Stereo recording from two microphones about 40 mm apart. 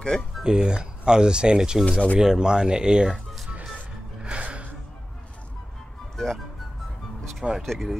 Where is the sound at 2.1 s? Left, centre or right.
Centre.